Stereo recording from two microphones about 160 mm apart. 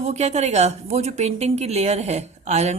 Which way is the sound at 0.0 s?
45° right (ahead or behind).